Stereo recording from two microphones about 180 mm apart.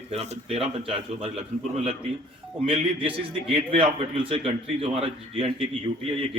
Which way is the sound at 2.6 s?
30° right (ahead or behind).